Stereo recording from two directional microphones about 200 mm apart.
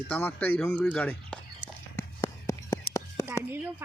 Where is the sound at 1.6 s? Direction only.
15° left (ahead or behind).